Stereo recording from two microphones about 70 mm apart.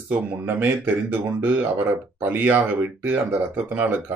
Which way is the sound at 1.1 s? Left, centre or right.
Right.